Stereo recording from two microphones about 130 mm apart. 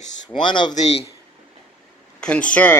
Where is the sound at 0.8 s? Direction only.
55° left (ahead or behind).